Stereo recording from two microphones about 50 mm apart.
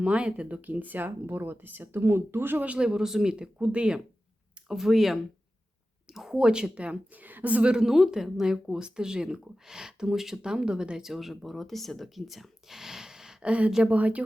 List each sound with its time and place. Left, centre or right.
0.0 s speech: right
2.6 s speech: centre
3.3 s a woman's voice: right
4.7 s a woman's voice: centre
7.9 s speech: centre
13.4 s a woman's voice: right